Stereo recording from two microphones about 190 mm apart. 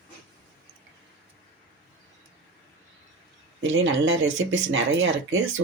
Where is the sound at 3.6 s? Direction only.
90° right.